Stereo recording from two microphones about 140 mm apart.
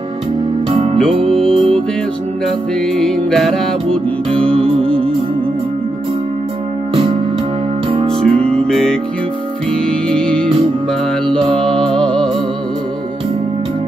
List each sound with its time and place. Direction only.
0.9 s music: 5° left (ahead or behind)
3.0 s music: centre (ahead or behind)
4.5 s music: 40° right (ahead or behind)
7.9 s music: 40° right (ahead or behind)
8.5 s music: 5° left (ahead or behind)
11.5 s music: 5° left (ahead or behind)